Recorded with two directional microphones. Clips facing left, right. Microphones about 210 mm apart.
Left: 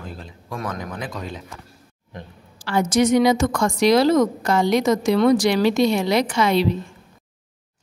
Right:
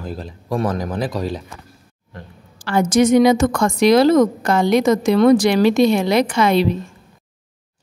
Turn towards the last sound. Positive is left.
turn(degrees=-55)  # may be behind; listen again after turning